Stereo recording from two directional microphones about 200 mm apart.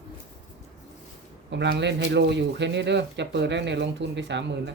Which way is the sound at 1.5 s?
60° right (ahead or behind).